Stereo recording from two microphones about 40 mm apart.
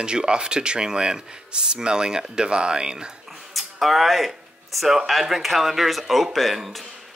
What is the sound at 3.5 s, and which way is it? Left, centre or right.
A man's voice, centre.